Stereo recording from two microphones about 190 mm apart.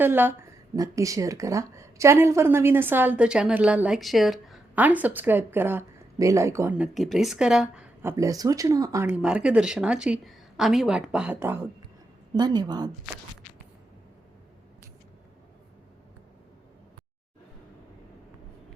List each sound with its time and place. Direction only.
0.0 s a woman's voice: 10° right (ahead or behind)
8.1 s a woman's voice: 15° right (ahead or behind)